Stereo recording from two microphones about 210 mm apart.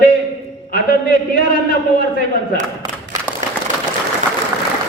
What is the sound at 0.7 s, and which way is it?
A man's voice, 45° left (ahead or behind).